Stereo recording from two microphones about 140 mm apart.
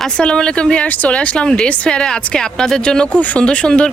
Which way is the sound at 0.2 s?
5° left (ahead or behind).